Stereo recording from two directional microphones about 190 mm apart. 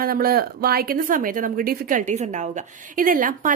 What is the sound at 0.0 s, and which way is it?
A woman's voice, 50° right (ahead or behind).